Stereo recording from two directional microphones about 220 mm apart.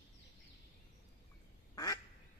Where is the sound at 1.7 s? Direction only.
15° left (ahead or behind).